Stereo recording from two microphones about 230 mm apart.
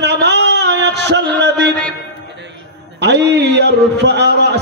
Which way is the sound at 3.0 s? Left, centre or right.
Right.